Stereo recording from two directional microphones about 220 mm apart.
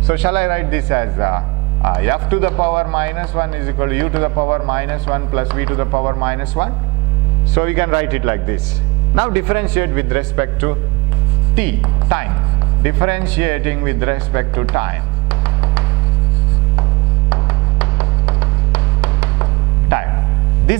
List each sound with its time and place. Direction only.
0.0 s speech: 10° right (ahead or behind)
6.2 s speech: 10° right (ahead or behind)
17.3 s music: 10° right (ahead or behind)